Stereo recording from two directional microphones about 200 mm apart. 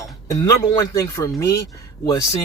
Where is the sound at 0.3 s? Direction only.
15° left (ahead or behind).